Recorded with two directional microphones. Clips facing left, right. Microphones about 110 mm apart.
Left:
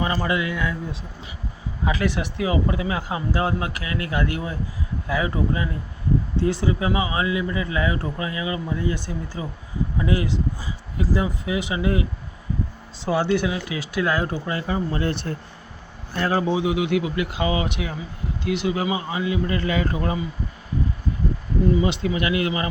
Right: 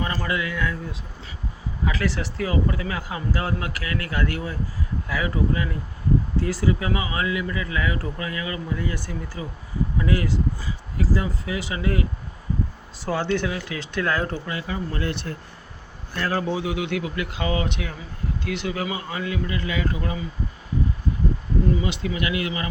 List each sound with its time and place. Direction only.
0.0 s speech: 20° left (ahead or behind)
1.8 s speech: 20° left (ahead or behind)
13.1 s speech: 10° left (ahead or behind)
14.4 s speech: 30° left (ahead or behind)
19.5 s speech: 45° left (ahead or behind)
21.8 s speech: 25° left (ahead or behind)